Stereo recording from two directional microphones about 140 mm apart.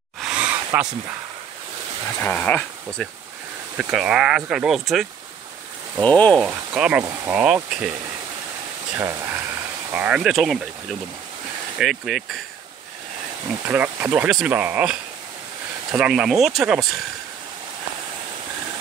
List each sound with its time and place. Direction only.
0.2 s a sound: 10° right (ahead or behind)
2.2 s speech: 10° left (ahead or behind)
3.7 s speech: 5° right (ahead or behind)
5.9 s speech: 10° left (ahead or behind)
6.4 s speech: 10° right (ahead or behind)
8.9 s speech: 15° right (ahead or behind)
13.7 s speech: 10° right (ahead or behind)